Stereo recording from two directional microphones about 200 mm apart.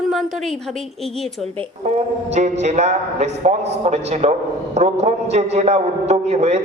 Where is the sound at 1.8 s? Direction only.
35° right (ahead or behind).